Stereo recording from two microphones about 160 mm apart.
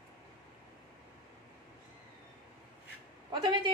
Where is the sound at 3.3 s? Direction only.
30° right (ahead or behind).